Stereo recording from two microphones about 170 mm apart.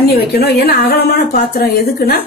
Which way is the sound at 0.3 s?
70° left (ahead or behind).